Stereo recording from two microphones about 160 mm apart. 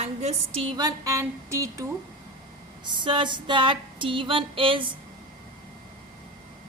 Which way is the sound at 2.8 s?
30° right (ahead or behind).